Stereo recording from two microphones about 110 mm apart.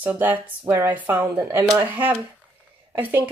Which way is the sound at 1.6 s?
35° right (ahead or behind).